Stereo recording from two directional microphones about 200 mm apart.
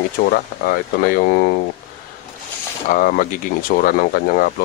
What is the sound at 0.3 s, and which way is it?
Speech, 45° left (ahead or behind).